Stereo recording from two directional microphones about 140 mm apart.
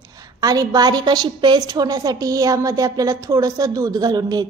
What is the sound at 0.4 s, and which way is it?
A woman's voice, 25° right (ahead or behind).